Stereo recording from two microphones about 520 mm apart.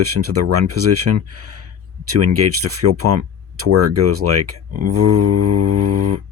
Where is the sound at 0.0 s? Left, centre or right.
Right.